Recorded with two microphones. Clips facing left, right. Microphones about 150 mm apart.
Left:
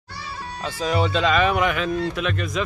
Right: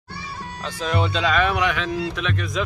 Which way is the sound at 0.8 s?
5° left (ahead or behind).